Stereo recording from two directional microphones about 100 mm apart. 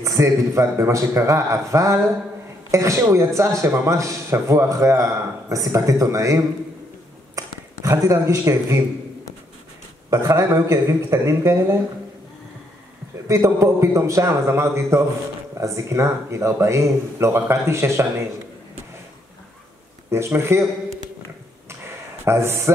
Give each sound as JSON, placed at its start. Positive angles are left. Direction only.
{"t": 0.0, "sound": "a man's voice", "side_deg": -30}
{"t": 10.0, "sound": "speech", "side_deg": -35}
{"t": 13.3, "sound": "speech", "side_deg": -30}
{"t": 20.1, "sound": "speech", "side_deg": -25}
{"t": 21.6, "sound": "a sound", "side_deg": -25}